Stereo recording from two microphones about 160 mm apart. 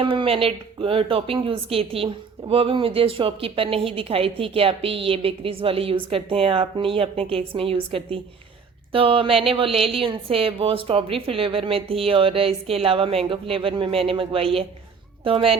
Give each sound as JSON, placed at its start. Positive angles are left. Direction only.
{"t": 0.0, "sound": "a woman's voice", "side_deg": -35}